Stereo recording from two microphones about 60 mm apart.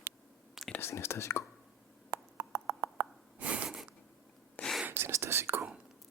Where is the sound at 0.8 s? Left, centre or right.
Left.